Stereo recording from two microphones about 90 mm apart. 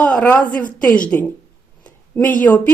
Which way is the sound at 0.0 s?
15° left (ahead or behind).